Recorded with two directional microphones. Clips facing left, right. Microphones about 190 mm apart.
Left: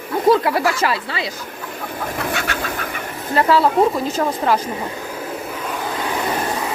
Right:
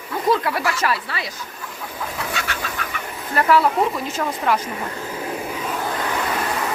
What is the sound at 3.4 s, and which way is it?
A woman's voice, 30° left (ahead or behind).